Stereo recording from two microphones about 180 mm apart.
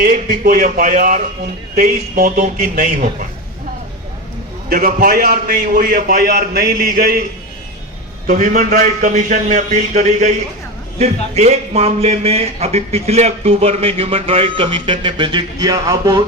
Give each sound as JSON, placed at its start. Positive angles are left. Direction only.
{"t": 0.0, "sound": "a man's voice", "side_deg": -55}
{"t": 4.7, "sound": "a man's voice", "side_deg": -55}
{"t": 8.3, "sound": "a man's voice", "side_deg": -45}